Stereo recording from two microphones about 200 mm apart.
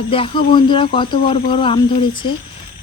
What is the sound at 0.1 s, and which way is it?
Speech, 25° left (ahead or behind).